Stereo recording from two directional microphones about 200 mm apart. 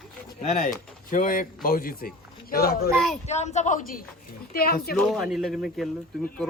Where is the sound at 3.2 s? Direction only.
35° left (ahead or behind).